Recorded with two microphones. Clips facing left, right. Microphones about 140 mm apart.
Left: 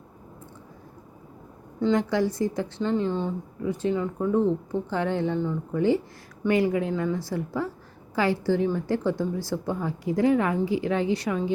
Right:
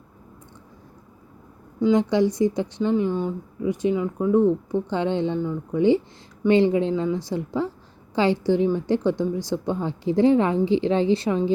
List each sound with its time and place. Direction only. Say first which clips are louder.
1.8 s speech: right 4 dB; 20° right (ahead or behind)
5.4 s speech: right 2 dB; 10° right (ahead or behind)
6.5 s a woman's voice: right 5 dB; 25° right (ahead or behind)